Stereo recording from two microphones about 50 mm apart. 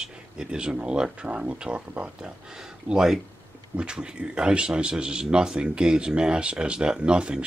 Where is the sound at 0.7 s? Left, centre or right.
Centre.